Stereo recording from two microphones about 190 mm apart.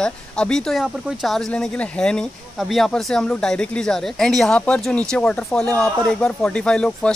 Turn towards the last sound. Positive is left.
turn(degrees=5)  # may be behind; listen again after turning